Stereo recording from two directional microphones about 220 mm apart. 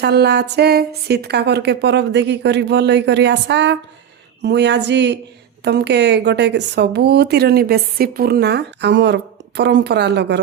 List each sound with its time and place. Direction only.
0.0 s a woman's voice: 50° right (ahead or behind)